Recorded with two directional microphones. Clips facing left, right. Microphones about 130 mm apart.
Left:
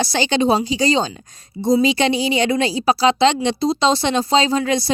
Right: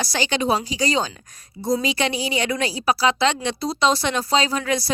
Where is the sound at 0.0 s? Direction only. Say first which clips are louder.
Left 5 dB; 25° left (ahead or behind).